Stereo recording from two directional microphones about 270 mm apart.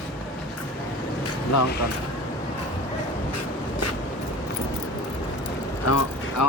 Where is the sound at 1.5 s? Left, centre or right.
Left.